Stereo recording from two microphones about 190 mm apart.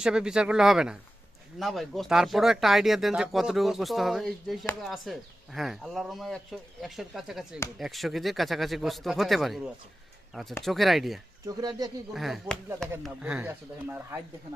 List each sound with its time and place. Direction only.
0.0 s speech: 5° right (ahead or behind)
10.6 s speech: centre (ahead or behind)
11.4 s speech: 20° right (ahead or behind)
12.1 s speech: centre (ahead or behind)